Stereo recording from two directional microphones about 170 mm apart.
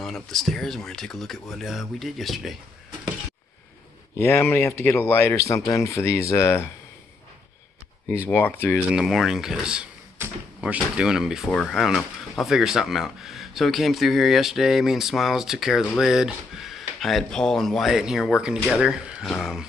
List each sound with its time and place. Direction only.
0.0 s speech: centre (ahead or behind)
4.2 s speech: 15° left (ahead or behind)
8.3 s speech: 10° left (ahead or behind)
8.9 s speech: centre (ahead or behind)